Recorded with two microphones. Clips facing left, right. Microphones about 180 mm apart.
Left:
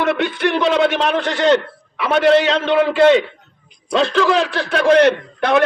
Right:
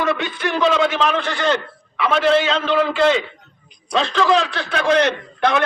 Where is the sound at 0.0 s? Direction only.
65° left (ahead or behind).